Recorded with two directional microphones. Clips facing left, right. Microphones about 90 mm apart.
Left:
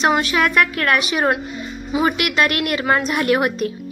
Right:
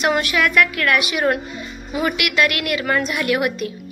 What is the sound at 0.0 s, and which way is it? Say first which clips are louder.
A woman's voice: left 1 dB; 30° left (ahead or behind).